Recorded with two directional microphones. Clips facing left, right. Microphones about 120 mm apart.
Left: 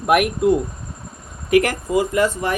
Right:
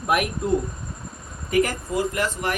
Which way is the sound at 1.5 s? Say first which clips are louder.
Left 5 dB; 80° left.